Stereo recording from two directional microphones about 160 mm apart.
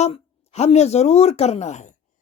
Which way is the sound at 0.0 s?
40° left (ahead or behind).